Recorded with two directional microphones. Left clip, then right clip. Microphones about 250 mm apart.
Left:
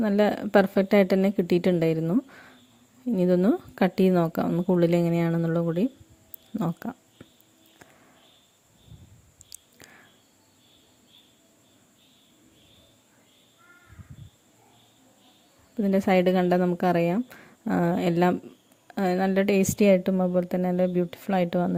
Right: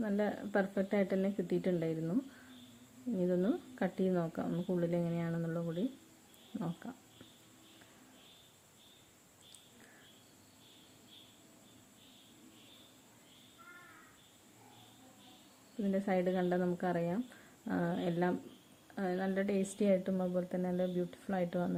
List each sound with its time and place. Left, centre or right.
0.0 s speech: left
15.8 s speech: left